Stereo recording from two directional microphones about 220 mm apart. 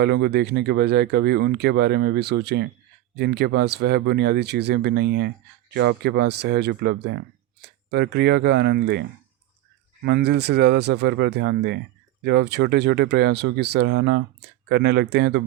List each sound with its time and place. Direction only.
0.0 s speech: 50° right (ahead or behind)